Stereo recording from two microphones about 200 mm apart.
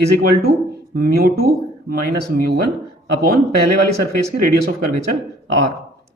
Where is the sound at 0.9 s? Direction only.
50° right (ahead or behind).